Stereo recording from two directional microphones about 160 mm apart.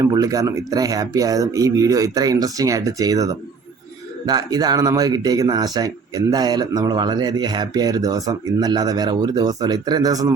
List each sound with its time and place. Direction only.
0.0 s speech: 20° right (ahead or behind)